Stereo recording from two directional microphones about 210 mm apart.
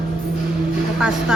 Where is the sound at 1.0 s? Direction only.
Centre (ahead or behind).